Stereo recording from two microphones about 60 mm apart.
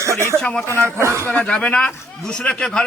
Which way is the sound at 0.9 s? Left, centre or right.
Right.